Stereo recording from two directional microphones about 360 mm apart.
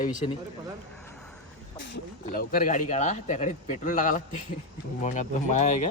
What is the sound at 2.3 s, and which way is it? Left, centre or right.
A man's voice, left.